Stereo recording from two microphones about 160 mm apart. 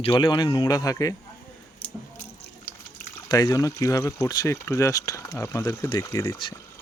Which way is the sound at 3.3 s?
20° left (ahead or behind).